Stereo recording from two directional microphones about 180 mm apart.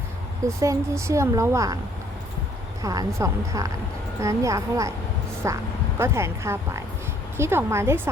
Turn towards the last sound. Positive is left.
turn(degrees=-15)  # may be behind; listen again after turning